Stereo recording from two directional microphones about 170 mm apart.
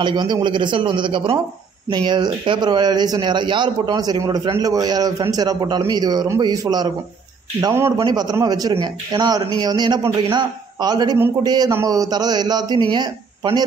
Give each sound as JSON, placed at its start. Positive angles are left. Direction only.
{"t": 0.0, "sound": "speech", "side_deg": -25}